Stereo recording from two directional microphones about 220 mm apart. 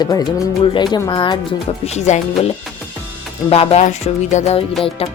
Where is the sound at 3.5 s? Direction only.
25° left (ahead or behind).